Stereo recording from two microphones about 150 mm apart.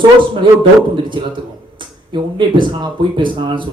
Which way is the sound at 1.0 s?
35° right (ahead or behind).